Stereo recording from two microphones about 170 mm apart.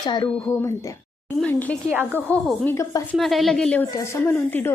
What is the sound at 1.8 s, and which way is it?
Speech, 10° right (ahead or behind).